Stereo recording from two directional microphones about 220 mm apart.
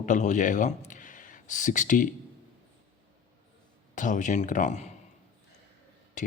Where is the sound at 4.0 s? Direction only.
35° left (ahead or behind).